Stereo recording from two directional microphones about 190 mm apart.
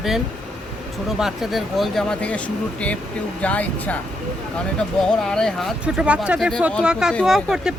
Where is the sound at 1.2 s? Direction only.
Centre (ahead or behind).